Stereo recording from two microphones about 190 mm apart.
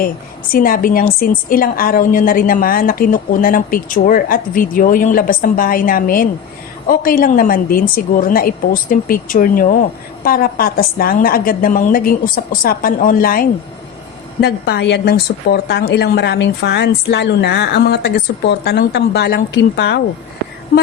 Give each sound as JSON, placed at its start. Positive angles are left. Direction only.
{"t": 0.5, "sound": "a woman's voice", "side_deg": 50}
{"t": 14.4, "sound": "a woman's voice", "side_deg": 60}